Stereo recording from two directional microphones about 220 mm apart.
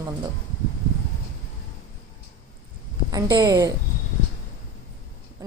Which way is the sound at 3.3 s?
20° right (ahead or behind).